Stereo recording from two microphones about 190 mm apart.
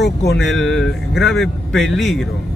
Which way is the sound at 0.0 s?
60° left (ahead or behind).